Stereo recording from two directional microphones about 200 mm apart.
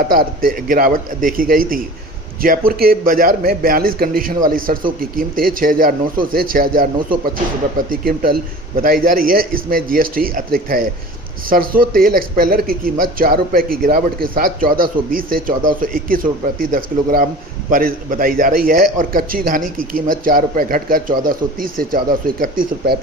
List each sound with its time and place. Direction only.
0.1 s speech: 45° right (ahead or behind)